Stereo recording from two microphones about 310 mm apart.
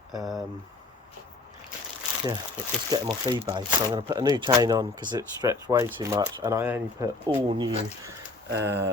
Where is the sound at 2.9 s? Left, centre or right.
Centre.